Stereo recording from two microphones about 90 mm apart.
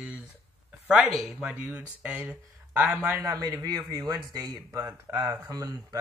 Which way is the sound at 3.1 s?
45° right (ahead or behind).